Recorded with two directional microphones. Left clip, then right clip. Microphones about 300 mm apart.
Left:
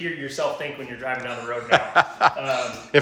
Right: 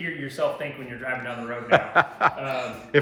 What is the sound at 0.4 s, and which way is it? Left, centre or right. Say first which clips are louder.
Speech: even; centre.